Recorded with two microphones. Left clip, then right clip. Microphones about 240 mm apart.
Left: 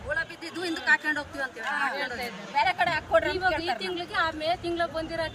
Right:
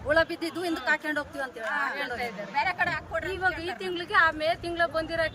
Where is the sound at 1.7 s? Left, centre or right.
Left.